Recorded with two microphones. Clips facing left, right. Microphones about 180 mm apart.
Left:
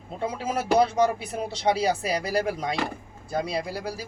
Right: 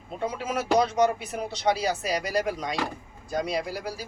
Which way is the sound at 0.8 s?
30° left (ahead or behind).